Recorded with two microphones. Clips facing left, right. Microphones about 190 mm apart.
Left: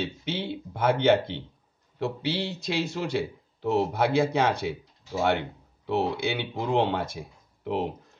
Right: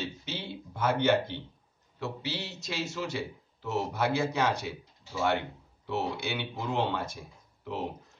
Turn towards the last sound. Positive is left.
turn(degrees=65)  # may be behind; listen again after turning